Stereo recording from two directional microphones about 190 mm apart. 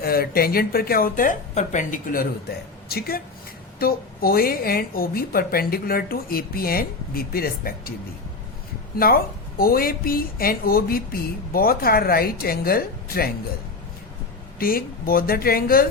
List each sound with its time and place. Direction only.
0.0 s a woman's voice: 50° left (ahead or behind)
9.0 s a woman's voice: 50° left (ahead or behind)
14.6 s a woman's voice: 50° left (ahead or behind)